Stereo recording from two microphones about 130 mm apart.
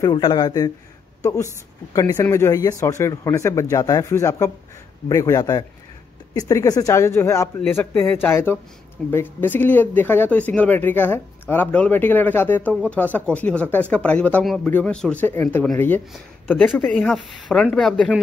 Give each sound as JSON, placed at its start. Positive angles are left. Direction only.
{"t": 0.0, "sound": "a man's voice", "side_deg": 35}
{"t": 14.4, "sound": "a man's voice", "side_deg": 0}
{"t": 16.1, "sound": "speech", "side_deg": 0}